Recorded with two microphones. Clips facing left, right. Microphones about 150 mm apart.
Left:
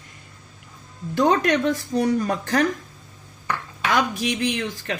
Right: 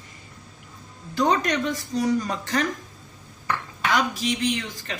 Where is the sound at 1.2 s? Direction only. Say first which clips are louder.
Left 3 dB; 55° left (ahead or behind).